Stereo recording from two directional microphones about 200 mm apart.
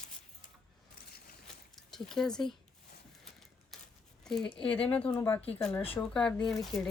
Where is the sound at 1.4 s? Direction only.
Centre (ahead or behind).